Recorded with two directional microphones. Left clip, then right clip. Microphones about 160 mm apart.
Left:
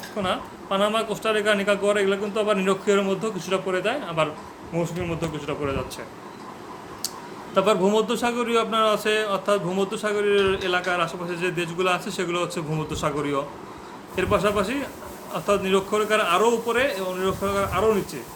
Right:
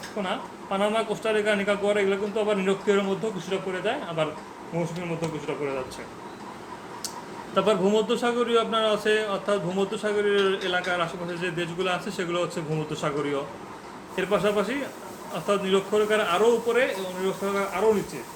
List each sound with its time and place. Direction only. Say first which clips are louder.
0.2 s a man's voice: left 4 dB; 40° left (ahead or behind)
7.5 s a man's voice: left 2 dB; 30° left (ahead or behind)